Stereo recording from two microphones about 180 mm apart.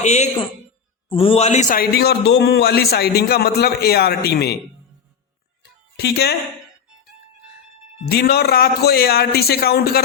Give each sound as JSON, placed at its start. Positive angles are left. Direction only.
{"t": 0.0, "sound": "a woman's voice", "side_deg": 40}
{"t": 6.0, "sound": "a man's voice", "side_deg": 60}
{"t": 8.1, "sound": "a man's voice", "side_deg": 60}